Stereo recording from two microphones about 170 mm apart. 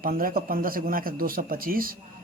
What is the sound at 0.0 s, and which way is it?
Speech, 60° right (ahead or behind).